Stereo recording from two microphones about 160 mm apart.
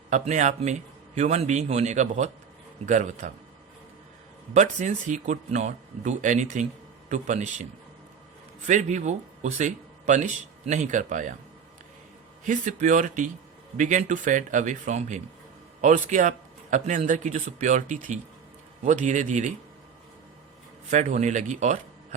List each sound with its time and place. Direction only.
0.1 s speech: 50° right (ahead or behind)
4.5 s speech: 50° right (ahead or behind)
12.5 s speech: 50° right (ahead or behind)
20.9 s speech: 50° right (ahead or behind)